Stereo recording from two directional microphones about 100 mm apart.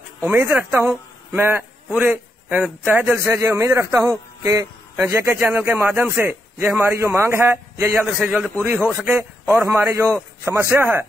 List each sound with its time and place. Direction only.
0.2 s speech: 25° right (ahead or behind)
0.7 s a sound: 20° right (ahead or behind)
2.0 s a man's voice: 15° right (ahead or behind); by 4.1 s 30° right (ahead or behind)
4.4 s a sound: 30° right (ahead or behind)
5.0 s speech: 25° right (ahead or behind)
8.2 s a man's voice: 10° right (ahead or behind)
8.6 s speech: 20° right (ahead or behind)